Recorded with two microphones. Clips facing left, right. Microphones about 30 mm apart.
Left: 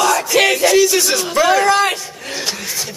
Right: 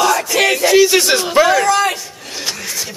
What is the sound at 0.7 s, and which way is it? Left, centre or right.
Speech, right.